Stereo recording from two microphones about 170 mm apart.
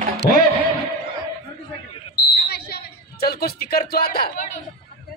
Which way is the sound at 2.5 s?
70° left (ahead or behind).